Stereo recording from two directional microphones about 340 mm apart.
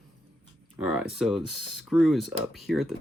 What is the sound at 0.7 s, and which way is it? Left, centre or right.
Speech, centre.